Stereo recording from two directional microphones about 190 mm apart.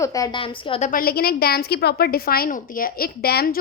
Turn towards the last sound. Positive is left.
turn(degrees=55)  # may be behind; listen again after turning